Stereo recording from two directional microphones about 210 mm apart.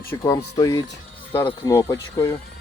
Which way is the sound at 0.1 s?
15° left (ahead or behind).